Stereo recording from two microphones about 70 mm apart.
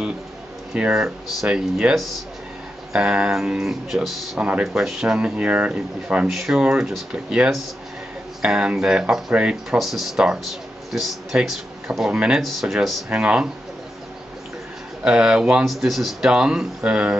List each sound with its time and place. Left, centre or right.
0.9 s speech: centre
4.4 s speech: centre
9.7 s a man's voice: centre
12.4 s speech: centre
13.1 s speech: centre
15.0 s speech: centre